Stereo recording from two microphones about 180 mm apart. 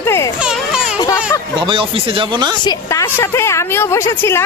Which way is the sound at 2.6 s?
20° left (ahead or behind).